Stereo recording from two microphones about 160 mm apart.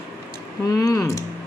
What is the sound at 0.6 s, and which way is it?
Speech, 20° left (ahead or behind).